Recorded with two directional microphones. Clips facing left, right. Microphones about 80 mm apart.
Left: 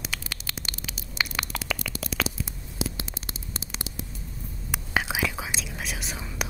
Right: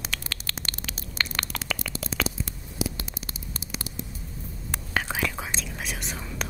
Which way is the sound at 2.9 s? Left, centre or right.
Left.